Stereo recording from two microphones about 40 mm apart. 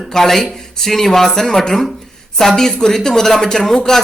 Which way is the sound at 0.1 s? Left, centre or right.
Centre.